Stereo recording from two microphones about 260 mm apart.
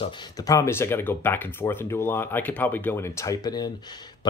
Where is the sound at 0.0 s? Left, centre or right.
Centre.